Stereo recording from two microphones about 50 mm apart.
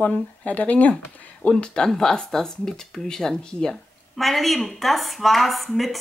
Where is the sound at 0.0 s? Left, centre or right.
Left.